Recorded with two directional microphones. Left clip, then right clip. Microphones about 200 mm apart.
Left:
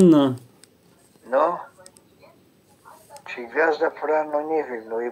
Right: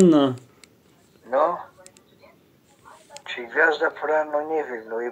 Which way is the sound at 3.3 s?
30° left (ahead or behind).